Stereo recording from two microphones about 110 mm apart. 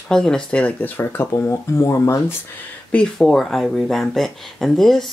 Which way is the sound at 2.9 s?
5° left (ahead or behind).